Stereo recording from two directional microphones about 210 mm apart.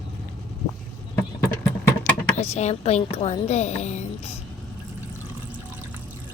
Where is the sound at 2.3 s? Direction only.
30° left (ahead or behind).